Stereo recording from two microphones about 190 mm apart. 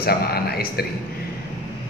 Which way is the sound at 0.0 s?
55° left (ahead or behind).